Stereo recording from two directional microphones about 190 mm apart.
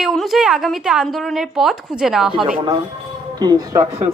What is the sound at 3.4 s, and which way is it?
Speech, 20° right (ahead or behind).